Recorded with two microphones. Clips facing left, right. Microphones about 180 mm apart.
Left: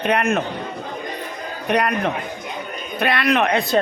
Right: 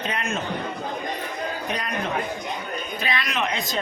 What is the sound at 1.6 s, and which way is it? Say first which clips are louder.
Speech: left 12 dB; 65° left (ahead or behind).